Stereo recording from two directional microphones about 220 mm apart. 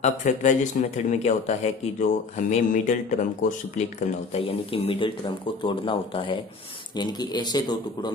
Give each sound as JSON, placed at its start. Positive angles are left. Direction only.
{"t": 0.0, "sound": "a man's voice", "side_deg": 35}